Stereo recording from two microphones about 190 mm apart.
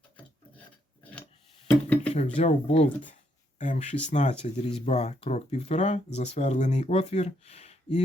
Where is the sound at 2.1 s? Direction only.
35° left (ahead or behind).